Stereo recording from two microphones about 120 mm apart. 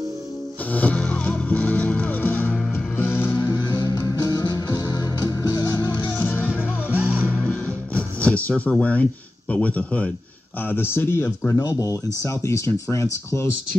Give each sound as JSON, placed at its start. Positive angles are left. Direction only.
{"t": 0.7, "sound": "music", "side_deg": 15}
{"t": 3.7, "sound": "music", "side_deg": 30}
{"t": 6.0, "sound": "music", "side_deg": 15}
{"t": 6.9, "sound": "music", "side_deg": -15}
{"t": 7.3, "sound": "music", "side_deg": 10}
{"t": 9.5, "sound": "speech", "side_deg": 10}